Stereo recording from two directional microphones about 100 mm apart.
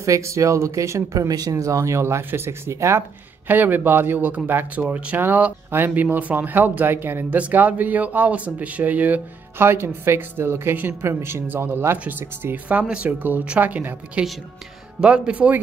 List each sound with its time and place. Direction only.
0.0 s speech: 30° right (ahead or behind); by 15.6 s 15° right (ahead or behind)